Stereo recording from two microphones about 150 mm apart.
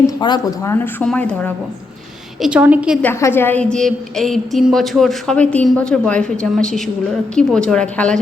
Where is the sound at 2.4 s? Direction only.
10° right (ahead or behind).